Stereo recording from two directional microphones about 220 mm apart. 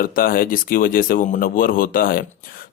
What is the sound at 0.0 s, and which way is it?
A man's voice, 40° left (ahead or behind).